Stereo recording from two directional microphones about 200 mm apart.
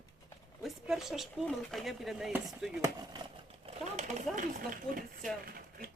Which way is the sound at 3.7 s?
35° right (ahead or behind).